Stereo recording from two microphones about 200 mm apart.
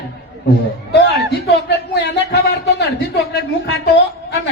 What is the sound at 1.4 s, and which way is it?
Speech, 55° left (ahead or behind).